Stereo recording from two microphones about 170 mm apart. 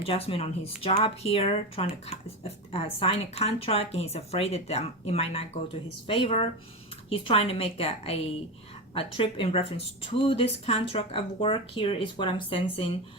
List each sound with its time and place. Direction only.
0.0 s speech: 35° left (ahead or behind)